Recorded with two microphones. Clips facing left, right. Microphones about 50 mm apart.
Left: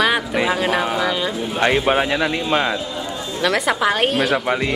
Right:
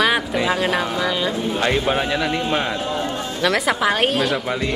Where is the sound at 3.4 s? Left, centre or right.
Centre.